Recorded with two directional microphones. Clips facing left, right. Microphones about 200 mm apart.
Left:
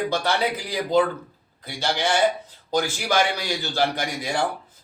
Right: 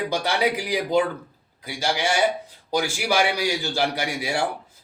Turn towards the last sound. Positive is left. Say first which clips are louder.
# even
turn(degrees=-10)  # may be behind; listen again after turning